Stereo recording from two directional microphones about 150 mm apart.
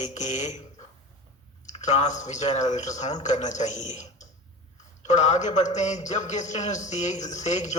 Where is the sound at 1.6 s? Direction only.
50° left (ahead or behind).